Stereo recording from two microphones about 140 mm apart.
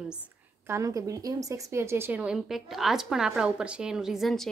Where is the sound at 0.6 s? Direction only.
20° right (ahead or behind).